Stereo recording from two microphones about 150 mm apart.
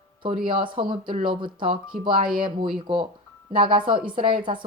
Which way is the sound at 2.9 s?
35° right (ahead or behind).